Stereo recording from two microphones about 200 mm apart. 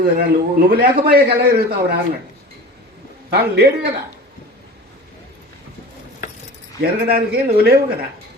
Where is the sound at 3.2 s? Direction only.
50° right (ahead or behind).